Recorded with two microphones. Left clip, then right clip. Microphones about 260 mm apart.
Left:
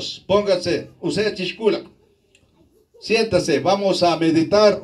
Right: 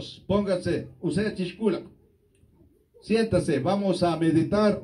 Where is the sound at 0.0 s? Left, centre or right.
Left.